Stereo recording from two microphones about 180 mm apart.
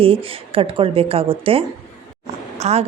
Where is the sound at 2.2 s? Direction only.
35° right (ahead or behind).